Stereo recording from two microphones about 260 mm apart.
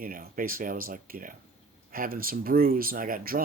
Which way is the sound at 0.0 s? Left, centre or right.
Right.